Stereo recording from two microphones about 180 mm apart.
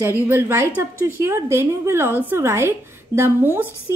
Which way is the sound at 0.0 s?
10° right (ahead or behind).